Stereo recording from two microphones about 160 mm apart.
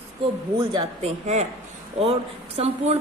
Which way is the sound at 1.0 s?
45° right (ahead or behind).